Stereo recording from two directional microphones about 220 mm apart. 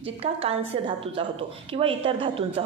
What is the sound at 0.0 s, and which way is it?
Speech, 25° right (ahead or behind).